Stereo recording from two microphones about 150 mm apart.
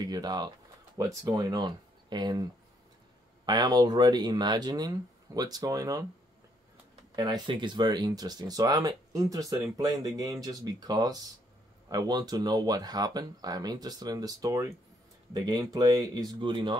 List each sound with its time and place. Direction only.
0.0 s speech: 25° right (ahead or behind)
3.4 s speech: 25° right (ahead or behind)
7.2 s speech: 25° right (ahead or behind)